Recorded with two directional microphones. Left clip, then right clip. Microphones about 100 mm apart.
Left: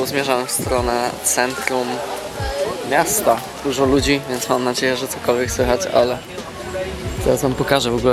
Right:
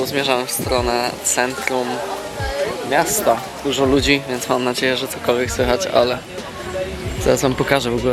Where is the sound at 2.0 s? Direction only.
15° left (ahead or behind).